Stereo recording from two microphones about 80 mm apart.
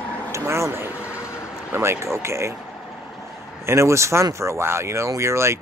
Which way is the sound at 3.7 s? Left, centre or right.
Right.